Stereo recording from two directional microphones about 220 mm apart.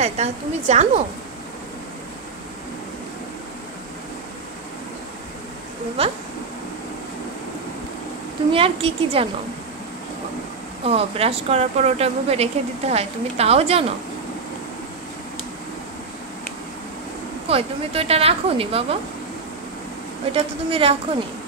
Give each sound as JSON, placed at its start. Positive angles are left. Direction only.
{"t": 0.0, "sound": "a woman's voice", "side_deg": -30}
{"t": 6.0, "sound": "speech", "side_deg": -25}
{"t": 8.5, "sound": "speech", "side_deg": -25}
{"t": 10.8, "sound": "speech", "side_deg": -25}
{"t": 17.5, "sound": "speech", "side_deg": -25}
{"t": 20.3, "sound": "speech", "side_deg": -25}